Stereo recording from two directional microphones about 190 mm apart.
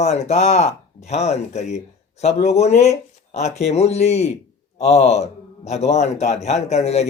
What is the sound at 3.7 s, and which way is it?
Speech, 35° left (ahead or behind).